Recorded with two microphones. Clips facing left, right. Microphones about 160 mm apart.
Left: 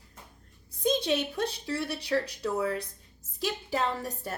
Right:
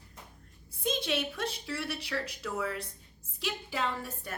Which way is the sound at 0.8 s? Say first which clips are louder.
Left 5 dB; 40° left (ahead or behind).